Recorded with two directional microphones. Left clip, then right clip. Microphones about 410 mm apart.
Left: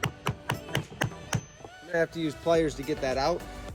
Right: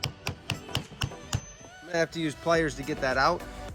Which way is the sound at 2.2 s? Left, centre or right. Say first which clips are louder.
Left 1 dB; centre.